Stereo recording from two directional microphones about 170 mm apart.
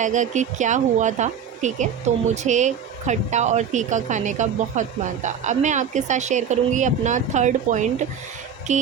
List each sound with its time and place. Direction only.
0.0 s speech: 45° right (ahead or behind)